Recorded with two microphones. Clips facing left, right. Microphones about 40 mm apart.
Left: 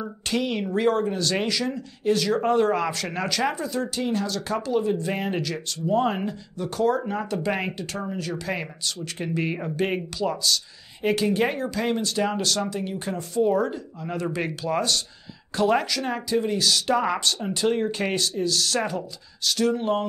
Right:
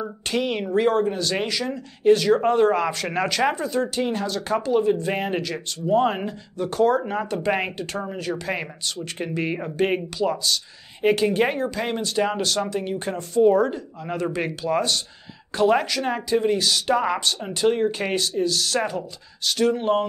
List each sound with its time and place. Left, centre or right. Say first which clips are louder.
0.0 s speech: right 2 dB; centre
19.4 s speech: right 2 dB; right